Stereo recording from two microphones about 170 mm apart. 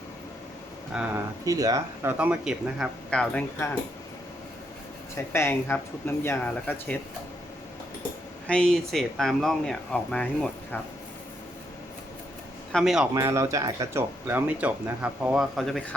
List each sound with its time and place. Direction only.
0.9 s speech: 5° right (ahead or behind)
1.5 s speech: 20° right (ahead or behind)
2.1 s speech: 5° right (ahead or behind)
5.1 s speech: 15° left (ahead or behind)
8.4 s speech: 5° left (ahead or behind)
12.7 s speech: centre (ahead or behind)
13.1 s speech: 15° right (ahead or behind); by 16.0 s centre (ahead or behind)